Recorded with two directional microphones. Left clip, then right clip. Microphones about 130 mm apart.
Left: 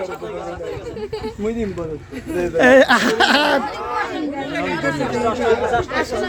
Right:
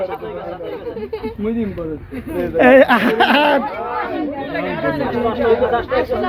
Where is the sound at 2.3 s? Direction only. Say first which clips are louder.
Right 2 dB; 10° left (ahead or behind).